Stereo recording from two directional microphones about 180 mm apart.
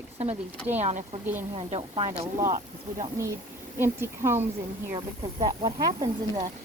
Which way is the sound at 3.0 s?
15° right (ahead or behind).